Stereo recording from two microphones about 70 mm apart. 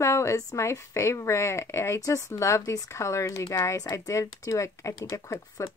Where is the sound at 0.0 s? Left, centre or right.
Left.